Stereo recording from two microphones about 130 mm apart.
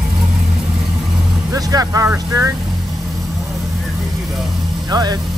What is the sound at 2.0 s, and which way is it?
Speech, 20° right (ahead or behind).